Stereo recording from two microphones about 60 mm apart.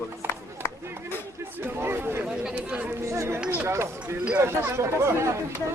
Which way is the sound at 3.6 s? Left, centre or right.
Right.